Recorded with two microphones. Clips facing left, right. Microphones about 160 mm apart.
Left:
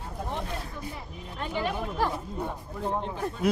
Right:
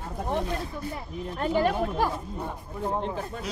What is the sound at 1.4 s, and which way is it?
Speech, 45° right (ahead or behind).